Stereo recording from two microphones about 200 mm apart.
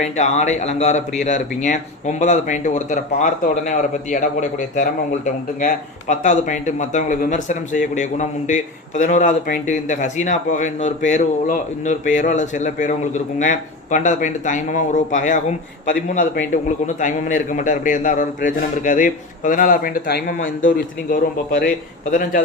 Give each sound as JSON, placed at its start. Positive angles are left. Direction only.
{"t": 0.0, "sound": "speech", "side_deg": 35}